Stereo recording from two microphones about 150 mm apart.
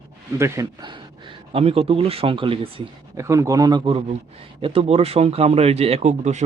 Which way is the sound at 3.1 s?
20° right (ahead or behind).